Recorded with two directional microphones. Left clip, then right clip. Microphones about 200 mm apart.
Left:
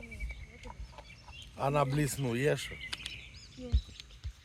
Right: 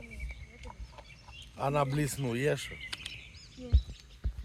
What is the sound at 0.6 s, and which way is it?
Chicken, 20° right (ahead or behind).